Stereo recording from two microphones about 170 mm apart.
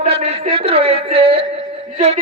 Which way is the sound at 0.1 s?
35° right (ahead or behind).